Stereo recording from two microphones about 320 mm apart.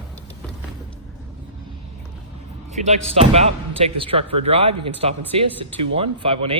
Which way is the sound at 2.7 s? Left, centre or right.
Right.